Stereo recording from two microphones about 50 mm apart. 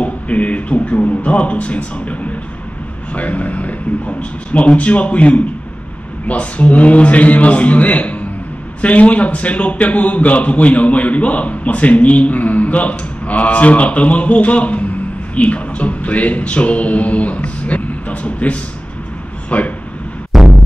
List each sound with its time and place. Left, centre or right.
0.0 s a man's voice: left
20.3 s music: centre